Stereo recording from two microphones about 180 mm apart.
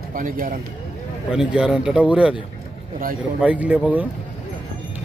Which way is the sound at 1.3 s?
5° right (ahead or behind).